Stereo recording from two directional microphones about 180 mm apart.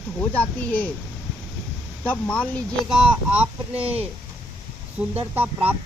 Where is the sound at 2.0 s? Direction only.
5° left (ahead or behind).